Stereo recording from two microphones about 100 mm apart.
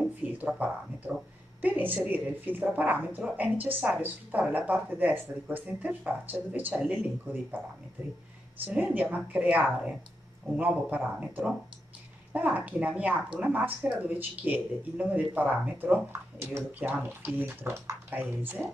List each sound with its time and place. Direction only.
0.2 s a woman's voice: 15° right (ahead or behind)
8.6 s speech: 15° right (ahead or behind)